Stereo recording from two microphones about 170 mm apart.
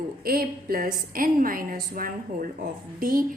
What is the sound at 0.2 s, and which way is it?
A woman's voice, 60° right (ahead or behind).